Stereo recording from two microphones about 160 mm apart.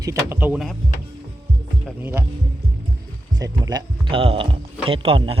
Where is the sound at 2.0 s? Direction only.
15° right (ahead or behind).